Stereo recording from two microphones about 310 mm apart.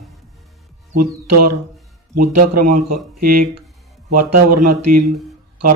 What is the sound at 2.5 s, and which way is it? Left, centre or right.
Speech, right.